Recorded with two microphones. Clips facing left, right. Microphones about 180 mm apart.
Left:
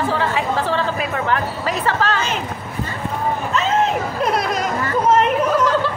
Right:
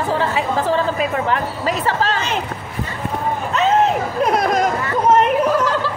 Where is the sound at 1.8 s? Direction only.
35° right (ahead or behind).